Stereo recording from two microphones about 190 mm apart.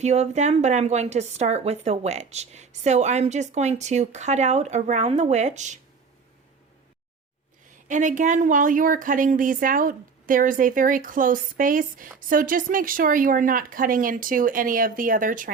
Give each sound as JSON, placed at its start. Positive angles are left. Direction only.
{"t": 0.0, "sound": "speech", "side_deg": -35}
{"t": 7.9, "sound": "a woman's voice", "side_deg": -40}